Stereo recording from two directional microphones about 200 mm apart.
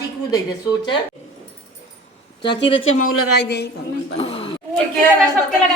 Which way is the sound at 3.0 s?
55° left (ahead or behind).